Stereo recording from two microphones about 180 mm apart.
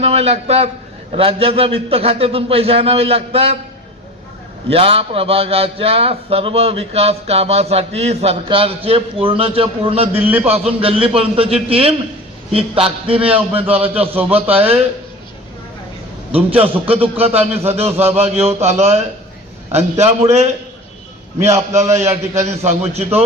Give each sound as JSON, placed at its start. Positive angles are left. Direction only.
{"t": 0.0, "sound": "a man's voice", "side_deg": -35}
{"t": 4.7, "sound": "a man's voice", "side_deg": -30}
{"t": 10.2, "sound": "a man's voice", "side_deg": -10}
{"t": 10.4, "sound": "a man's voice", "side_deg": -35}
{"t": 13.3, "sound": "a man's voice", "side_deg": -10}
{"t": 16.3, "sound": "a man's voice", "side_deg": -30}
{"t": 21.4, "sound": "a man's voice", "side_deg": -15}
{"t": 22.6, "sound": "a man's voice", "side_deg": -40}